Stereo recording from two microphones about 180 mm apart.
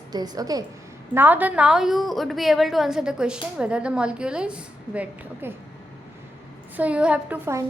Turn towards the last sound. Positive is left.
turn(degrees=-10)  # may be behind; listen again after turning